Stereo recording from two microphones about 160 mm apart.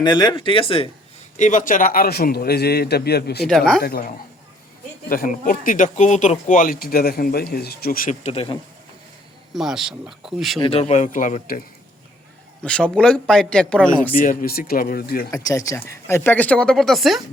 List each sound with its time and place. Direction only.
0.0 s speech: 25° left (ahead or behind)
1.4 s a man's voice: 50° left (ahead or behind); by 3.4 s 90° left
3.4 s a man's voice: centre (ahead or behind)
3.8 s speech: 70° left (ahead or behind)
5.0 s speech: 60° left (ahead or behind)
8.2 s speech: 40° left (ahead or behind)
9.5 s a man's voice: centre (ahead or behind)
10.6 s speech: 40° left (ahead or behind); by 11.6 s 55° left (ahead or behind)
12.6 s a man's voice: 5° left (ahead or behind)
14.2 s speech: 65° left (ahead or behind)
15.3 s speech: 20° left (ahead or behind); by 17.2 s centre (ahead or behind)